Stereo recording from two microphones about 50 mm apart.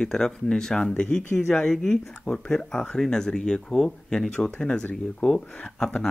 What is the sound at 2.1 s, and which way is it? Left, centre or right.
Speech, left.